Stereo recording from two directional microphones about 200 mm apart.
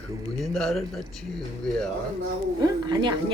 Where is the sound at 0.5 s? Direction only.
Centre (ahead or behind).